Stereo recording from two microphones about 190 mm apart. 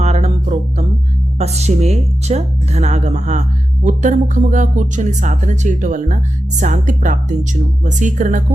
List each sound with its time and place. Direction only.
0.0 s music: 35° right (ahead or behind)
1.4 s speech: 35° right (ahead or behind)